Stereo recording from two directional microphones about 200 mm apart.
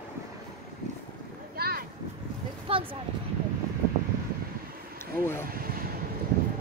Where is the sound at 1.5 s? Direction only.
50° right (ahead or behind).